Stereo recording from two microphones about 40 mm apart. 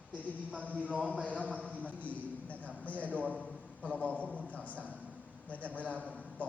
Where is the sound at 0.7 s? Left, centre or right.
Right.